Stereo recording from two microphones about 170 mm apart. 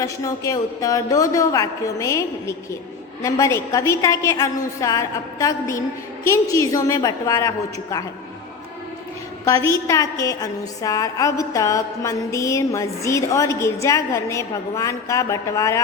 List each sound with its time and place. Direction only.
0.0 s a woman's voice: 20° left (ahead or behind)
9.4 s a woman's voice: 20° left (ahead or behind)